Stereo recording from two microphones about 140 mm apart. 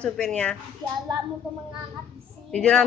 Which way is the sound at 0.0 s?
5° left (ahead or behind).